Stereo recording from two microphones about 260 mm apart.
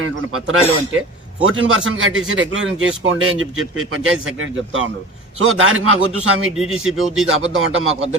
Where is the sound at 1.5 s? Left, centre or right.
Right.